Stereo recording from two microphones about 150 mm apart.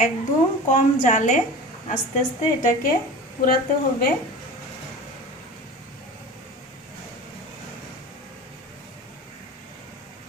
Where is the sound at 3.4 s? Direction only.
60° left (ahead or behind).